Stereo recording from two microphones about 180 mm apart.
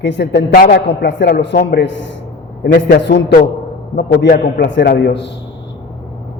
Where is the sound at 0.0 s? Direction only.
75° left (ahead or behind).